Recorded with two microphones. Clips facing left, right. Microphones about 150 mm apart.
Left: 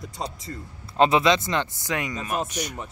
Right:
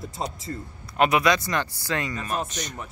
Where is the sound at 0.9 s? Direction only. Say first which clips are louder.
Left 2 dB; 25° left (ahead or behind); by 2.8 s 10° left (ahead or behind).